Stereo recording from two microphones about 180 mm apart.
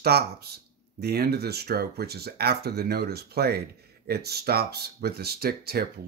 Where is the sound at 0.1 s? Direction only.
60° right (ahead or behind).